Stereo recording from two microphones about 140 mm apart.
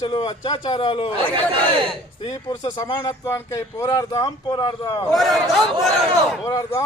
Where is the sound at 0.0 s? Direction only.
30° left (ahead or behind).